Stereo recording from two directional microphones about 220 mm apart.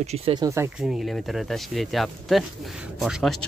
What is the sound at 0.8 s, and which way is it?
Speech, centre (ahead or behind).